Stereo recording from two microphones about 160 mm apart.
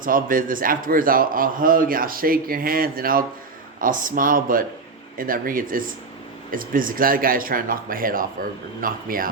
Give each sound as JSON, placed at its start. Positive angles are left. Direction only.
{"t": 0.0, "sound": "a man's voice", "side_deg": -60}